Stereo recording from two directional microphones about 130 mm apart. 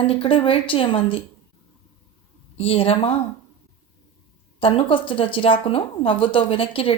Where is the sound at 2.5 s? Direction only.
50° left (ahead or behind).